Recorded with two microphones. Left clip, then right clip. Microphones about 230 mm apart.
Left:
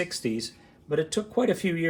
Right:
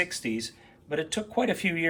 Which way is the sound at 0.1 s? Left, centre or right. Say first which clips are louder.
Left 2 dB; centre.